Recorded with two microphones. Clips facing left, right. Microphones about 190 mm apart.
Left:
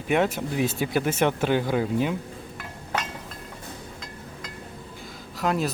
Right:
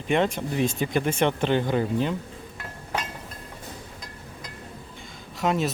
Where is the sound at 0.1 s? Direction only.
5° left (ahead or behind).